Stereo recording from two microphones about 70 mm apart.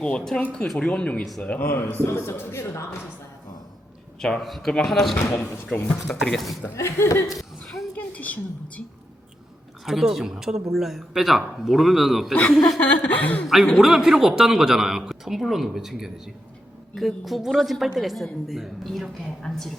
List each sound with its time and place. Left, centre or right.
0.0 s speech: centre
1.6 s a man's voice: left
4.2 s speech: centre
5.7 s chuckle: left
6.2 s speech: centre
6.7 s speech: left
7.3 s a sound: centre
7.9 s a sound: left
9.8 s speech: centre
12.3 s chuckle: centre
13.7 s speech: centre